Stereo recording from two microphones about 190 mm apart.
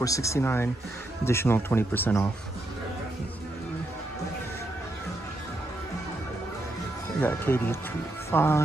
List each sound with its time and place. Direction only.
0.0 s speech: 15° left (ahead or behind)
7.2 s speech: 10° left (ahead or behind)